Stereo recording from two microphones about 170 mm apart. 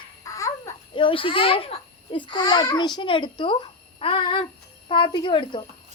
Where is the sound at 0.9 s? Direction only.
30° left (ahead or behind).